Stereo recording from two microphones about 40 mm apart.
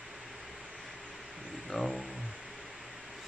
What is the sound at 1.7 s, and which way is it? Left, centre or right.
Vehicle, centre.